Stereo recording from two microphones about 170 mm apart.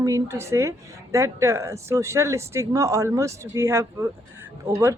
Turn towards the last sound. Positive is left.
turn(degrees=-15)  # may be behind; listen again after turning